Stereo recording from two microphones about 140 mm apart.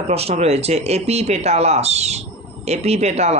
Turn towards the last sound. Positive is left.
turn(degrees=-50)  # may be behind; listen again after turning